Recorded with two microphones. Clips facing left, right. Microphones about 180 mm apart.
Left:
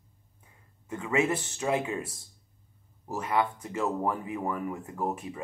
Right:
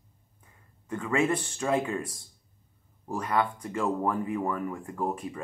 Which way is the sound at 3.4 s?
20° left (ahead or behind).